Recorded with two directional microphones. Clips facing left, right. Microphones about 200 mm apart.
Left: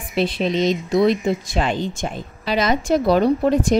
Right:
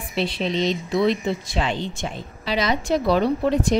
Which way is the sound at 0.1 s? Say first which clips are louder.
Left 4 dB; 50° left (ahead or behind).